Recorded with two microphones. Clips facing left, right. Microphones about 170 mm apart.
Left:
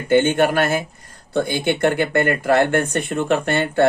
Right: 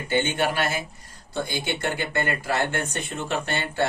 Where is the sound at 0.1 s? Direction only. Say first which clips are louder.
Left 9 dB; 50° left (ahead or behind).